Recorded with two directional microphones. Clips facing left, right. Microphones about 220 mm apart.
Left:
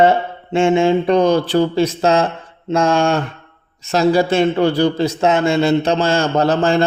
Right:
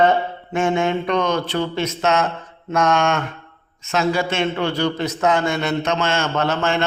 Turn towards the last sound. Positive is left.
turn(degrees=35)  # may be behind; listen again after turning